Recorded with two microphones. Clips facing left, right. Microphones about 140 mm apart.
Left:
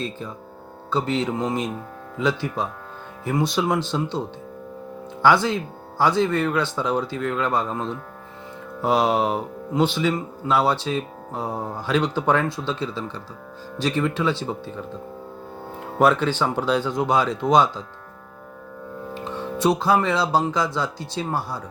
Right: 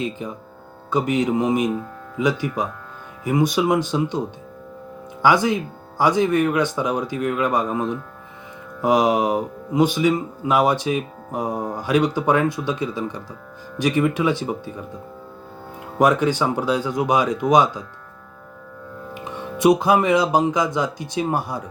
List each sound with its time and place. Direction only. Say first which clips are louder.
0.0 s speech: right 3 dB; 15° right (ahead or behind)
5.2 s speech: right 1 dB; 15° right (ahead or behind)
19.1 s speech: left 2 dB; 15° right (ahead or behind)